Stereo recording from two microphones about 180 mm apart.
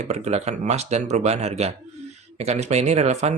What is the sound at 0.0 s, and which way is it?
Speech, 40° right (ahead or behind).